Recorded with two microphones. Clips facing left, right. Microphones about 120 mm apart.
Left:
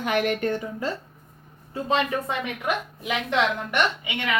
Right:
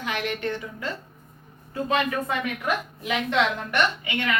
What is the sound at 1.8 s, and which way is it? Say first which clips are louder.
A woman's voice: left 1 dB; 25° left (ahead or behind).